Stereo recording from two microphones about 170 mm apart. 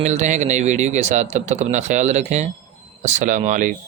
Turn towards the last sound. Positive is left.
turn(degrees=-50)  # may be behind; listen again after turning